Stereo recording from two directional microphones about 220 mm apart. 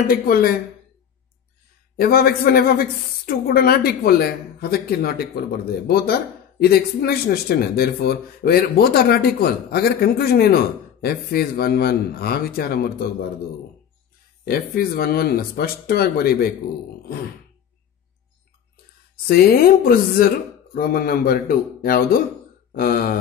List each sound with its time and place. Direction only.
0.3 s speech: 40° left (ahead or behind)
2.0 s speech: 45° left (ahead or behind)
14.4 s speech: 40° left (ahead or behind)
19.2 s a man's voice: 40° left (ahead or behind)
22.7 s a sound: 40° left (ahead or behind)